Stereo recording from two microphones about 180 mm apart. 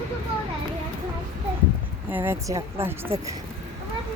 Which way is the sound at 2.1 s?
10° right (ahead or behind).